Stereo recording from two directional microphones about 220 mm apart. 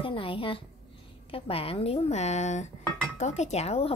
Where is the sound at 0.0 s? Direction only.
25° left (ahead or behind).